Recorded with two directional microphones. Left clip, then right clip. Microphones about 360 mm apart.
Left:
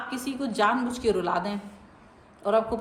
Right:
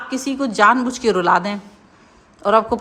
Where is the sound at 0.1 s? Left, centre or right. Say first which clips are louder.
Right 9 dB; right.